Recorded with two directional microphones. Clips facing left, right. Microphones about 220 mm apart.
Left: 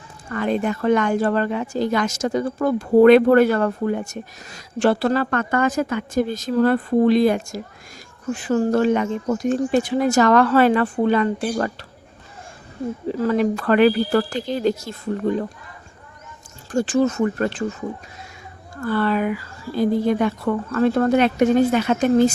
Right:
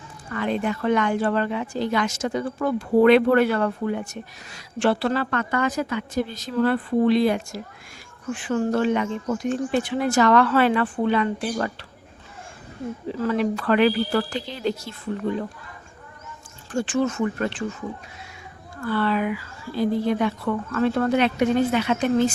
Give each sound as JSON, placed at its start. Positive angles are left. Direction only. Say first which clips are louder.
{"t": 0.3, "sound": "a woman's voice", "louder": "left 3 dB", "side_deg": 45}
{"t": 13.1, "sound": "a woman's voice", "louder": "left 3 dB", "side_deg": 40}
{"t": 16.7, "sound": "speech", "louder": "left 4 dB", "side_deg": 40}
{"t": 18.8, "sound": "a woman's voice", "louder": "left 3 dB", "side_deg": 45}